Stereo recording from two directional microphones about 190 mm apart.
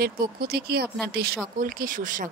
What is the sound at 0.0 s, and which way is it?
A woman's voice, 50° right (ahead or behind).